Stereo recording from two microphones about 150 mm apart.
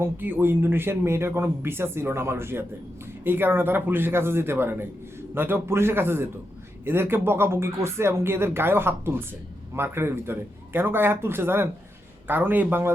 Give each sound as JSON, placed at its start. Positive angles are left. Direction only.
{"t": 0.0, "sound": "speech", "side_deg": -15}